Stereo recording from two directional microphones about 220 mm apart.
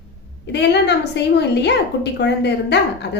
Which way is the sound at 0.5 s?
50° left (ahead or behind).